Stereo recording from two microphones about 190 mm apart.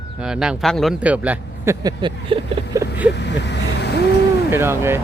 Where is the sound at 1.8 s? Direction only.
25° right (ahead or behind).